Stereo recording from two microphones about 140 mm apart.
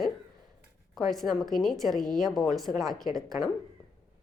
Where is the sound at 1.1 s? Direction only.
Centre (ahead or behind).